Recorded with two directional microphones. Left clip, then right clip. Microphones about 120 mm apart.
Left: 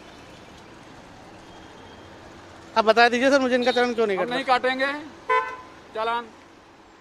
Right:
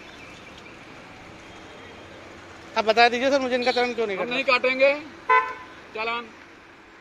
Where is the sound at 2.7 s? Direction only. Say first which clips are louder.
Left 1 dB; 60° left (ahead or behind); by 4.3 s 90° left.